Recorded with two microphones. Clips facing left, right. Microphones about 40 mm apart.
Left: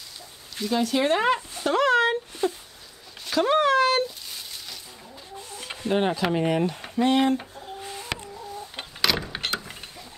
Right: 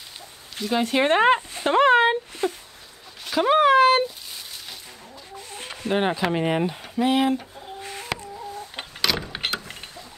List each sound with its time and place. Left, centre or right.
0.6 s speech: right
2.4 s a sound: right
3.3 s a sound: centre
5.9 s speech: right
7.0 s speech: centre
7.8 s chicken: right
9.0 s vehicle: centre
9.5 s mechanisms: centre